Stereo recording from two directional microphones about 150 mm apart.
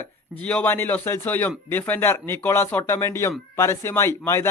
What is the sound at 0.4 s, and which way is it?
A man's voice, 10° left (ahead or behind).